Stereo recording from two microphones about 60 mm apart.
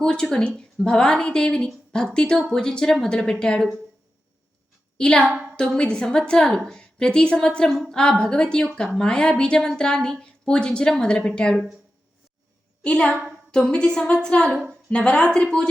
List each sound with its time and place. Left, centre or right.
0.0 s a woman's voice: centre
4.9 s a woman's voice: centre
12.8 s a woman's voice: centre